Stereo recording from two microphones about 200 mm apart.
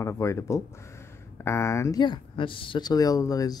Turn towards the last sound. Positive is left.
turn(degrees=15)  # may be behind; listen again after turning